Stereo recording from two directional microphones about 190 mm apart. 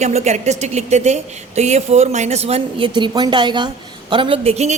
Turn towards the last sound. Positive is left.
turn(degrees=-35)  # may be behind; listen again after turning